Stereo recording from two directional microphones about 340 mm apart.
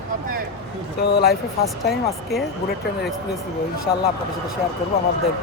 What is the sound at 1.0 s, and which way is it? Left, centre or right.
Speech, left.